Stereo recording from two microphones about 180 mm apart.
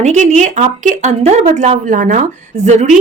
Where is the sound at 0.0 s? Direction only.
40° right (ahead or behind).